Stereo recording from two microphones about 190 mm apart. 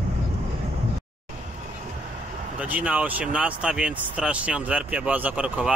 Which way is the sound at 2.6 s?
5° right (ahead or behind).